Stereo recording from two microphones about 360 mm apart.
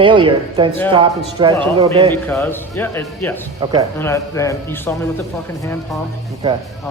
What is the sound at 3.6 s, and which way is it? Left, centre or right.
Speech, centre.